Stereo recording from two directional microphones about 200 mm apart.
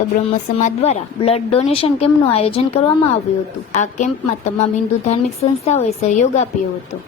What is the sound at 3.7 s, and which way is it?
A woman's voice, 35° left (ahead or behind).